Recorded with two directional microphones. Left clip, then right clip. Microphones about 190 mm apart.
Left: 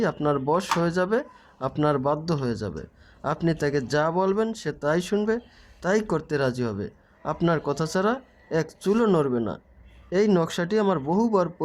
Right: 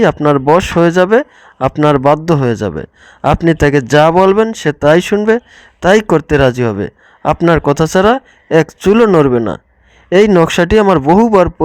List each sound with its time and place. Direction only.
0.0 s speech: 35° right (ahead or behind)